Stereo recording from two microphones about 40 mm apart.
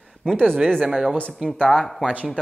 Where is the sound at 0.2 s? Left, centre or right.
Centre.